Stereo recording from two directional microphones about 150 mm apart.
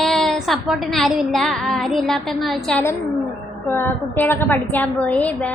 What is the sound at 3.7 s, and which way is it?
A woman's voice, 15° left (ahead or behind).